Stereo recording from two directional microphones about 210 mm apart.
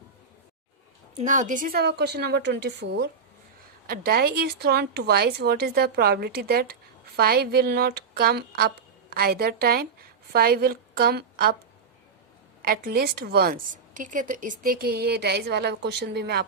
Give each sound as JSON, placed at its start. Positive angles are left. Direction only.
{"t": 1.2, "sound": "speech", "side_deg": -35}
{"t": 12.6, "sound": "speech", "side_deg": -45}